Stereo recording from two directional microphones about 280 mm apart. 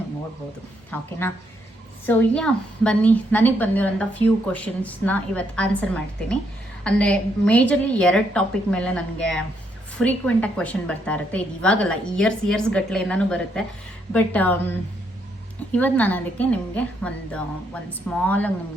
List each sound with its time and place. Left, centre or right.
0.9 s a woman's voice: centre
15.7 s a woman's voice: centre